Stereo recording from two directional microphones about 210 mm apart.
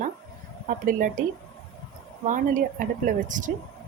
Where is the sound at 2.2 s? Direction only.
40° right (ahead or behind).